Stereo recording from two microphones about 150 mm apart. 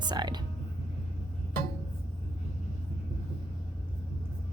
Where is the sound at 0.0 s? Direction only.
30° right (ahead or behind).